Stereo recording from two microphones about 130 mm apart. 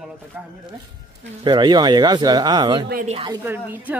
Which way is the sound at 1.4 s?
35° right (ahead or behind).